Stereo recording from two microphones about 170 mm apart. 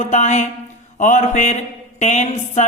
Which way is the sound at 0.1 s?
40° left (ahead or behind).